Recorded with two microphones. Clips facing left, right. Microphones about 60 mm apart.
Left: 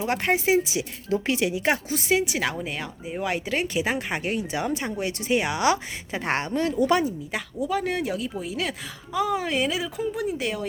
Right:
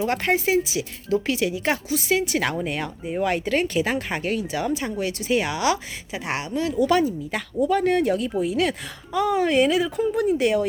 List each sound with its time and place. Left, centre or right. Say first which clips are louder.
0.0 s speech: right 2 dB; centre
2.6 s speech: right 4 dB; centre; by 6.8 s left
6.8 s speech: right 3 dB; left
7.3 s speech: right 5 dB; centre